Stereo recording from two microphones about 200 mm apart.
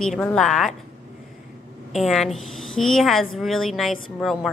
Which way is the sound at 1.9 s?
Centre (ahead or behind).